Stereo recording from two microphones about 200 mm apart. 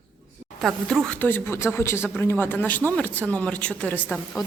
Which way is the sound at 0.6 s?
Centre (ahead or behind).